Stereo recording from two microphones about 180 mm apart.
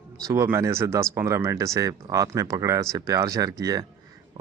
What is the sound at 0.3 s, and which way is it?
Speech, 15° right (ahead or behind).